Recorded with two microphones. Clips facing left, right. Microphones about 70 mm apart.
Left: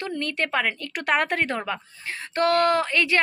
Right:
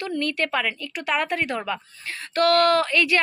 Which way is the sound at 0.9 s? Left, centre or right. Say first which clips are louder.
Left 2 dB; left.